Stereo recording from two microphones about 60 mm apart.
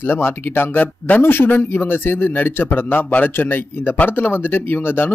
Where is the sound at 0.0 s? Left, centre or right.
Left.